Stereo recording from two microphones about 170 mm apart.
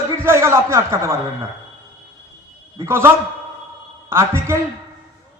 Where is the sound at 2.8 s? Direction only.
15° right (ahead or behind).